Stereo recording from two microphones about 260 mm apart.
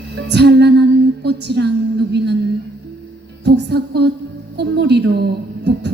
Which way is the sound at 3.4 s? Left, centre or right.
Right.